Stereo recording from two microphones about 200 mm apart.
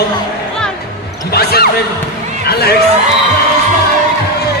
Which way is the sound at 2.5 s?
50° left (ahead or behind).